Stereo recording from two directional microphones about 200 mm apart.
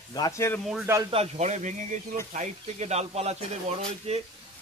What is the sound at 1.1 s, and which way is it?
Speech, 30° right (ahead or behind).